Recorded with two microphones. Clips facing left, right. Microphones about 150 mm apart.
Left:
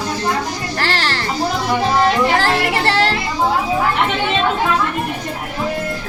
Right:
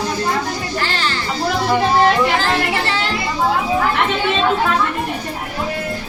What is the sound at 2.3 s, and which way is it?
Speech, 70° left (ahead or behind).